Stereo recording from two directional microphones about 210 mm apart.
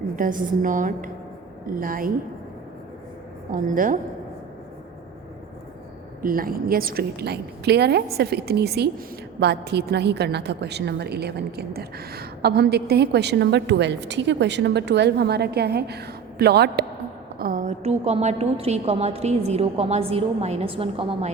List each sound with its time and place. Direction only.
0.2 s a woman's voice: 40° right (ahead or behind)
3.5 s a woman's voice: 40° right (ahead or behind)
6.2 s a woman's voice: 45° right (ahead or behind); by 21.2 s 25° right (ahead or behind)